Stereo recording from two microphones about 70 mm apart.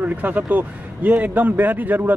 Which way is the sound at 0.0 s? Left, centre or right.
Right.